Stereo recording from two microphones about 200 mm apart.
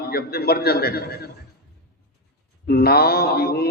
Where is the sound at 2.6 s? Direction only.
50° left (ahead or behind).